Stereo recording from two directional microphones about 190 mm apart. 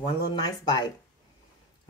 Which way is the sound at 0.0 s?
25° left (ahead or behind).